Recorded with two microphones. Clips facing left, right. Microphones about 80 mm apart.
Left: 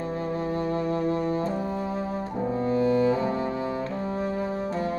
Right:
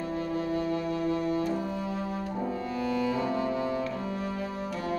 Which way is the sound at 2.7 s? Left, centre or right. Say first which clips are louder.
Left 8 dB; left.